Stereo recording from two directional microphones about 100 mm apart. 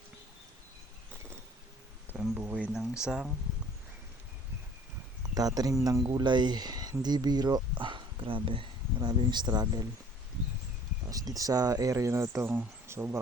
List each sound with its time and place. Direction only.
2.3 s speech: 15° right (ahead or behind)
2.7 s speech: 5° right (ahead or behind)
5.3 s speech: 40° right (ahead or behind)
6.1 s speech: 45° right (ahead or behind)
11.1 s speech: 35° right (ahead or behind); by 13.1 s 20° right (ahead or behind)